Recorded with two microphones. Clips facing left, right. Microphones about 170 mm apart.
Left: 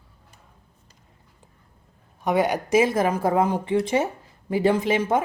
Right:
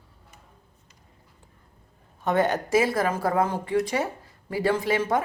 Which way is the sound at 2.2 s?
10° left (ahead or behind).